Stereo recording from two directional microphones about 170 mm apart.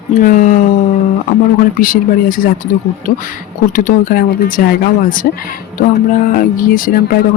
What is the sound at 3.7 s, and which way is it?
Speech, 55° left (ahead or behind).